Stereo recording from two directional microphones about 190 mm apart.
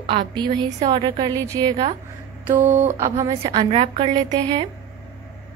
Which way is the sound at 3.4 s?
30° right (ahead or behind).